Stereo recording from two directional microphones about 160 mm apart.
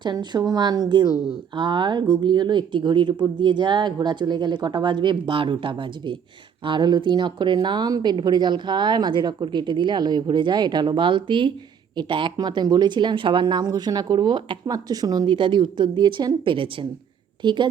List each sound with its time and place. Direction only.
0.0 s a woman's voice: 25° right (ahead or behind)